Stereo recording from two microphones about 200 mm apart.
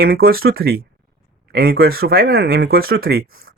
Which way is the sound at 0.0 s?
50° right (ahead or behind).